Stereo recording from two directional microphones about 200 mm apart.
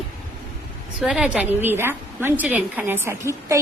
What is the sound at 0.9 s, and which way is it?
A woman's voice, centre (ahead or behind).